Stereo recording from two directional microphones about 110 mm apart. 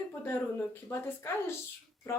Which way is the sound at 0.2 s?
15° left (ahead or behind).